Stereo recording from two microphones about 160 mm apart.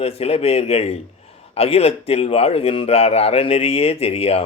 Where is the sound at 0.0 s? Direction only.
40° left (ahead or behind).